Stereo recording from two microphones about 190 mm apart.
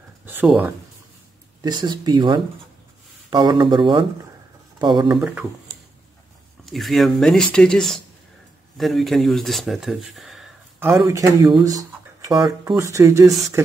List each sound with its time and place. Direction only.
0.2 s a sound: 10° right (ahead or behind)
1.6 s speech: 20° right (ahead or behind)
5.1 s speech: centre (ahead or behind)
6.6 s speech: centre (ahead or behind)
11.1 s speech: 20° right (ahead or behind)